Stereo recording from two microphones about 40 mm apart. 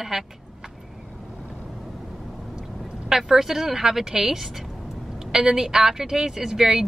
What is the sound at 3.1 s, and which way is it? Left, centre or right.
A woman's voice, centre.